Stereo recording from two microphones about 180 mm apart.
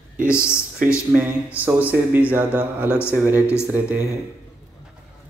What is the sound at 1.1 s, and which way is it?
A man's voice, 10° right (ahead or behind).